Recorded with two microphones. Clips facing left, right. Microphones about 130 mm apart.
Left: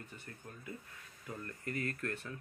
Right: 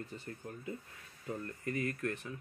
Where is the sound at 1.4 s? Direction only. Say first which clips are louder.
Right 2 dB; 20° right (ahead or behind).